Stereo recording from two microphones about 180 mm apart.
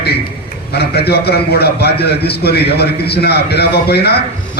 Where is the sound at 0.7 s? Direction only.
60° left (ahead or behind).